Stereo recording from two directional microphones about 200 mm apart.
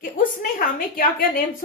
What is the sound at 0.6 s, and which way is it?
Speech, 45° left (ahead or behind).